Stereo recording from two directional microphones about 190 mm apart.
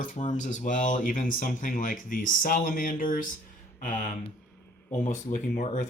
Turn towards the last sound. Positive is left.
turn(degrees=40)  # may be behind; listen again after turning